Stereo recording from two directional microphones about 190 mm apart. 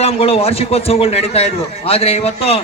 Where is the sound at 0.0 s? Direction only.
30° left (ahead or behind).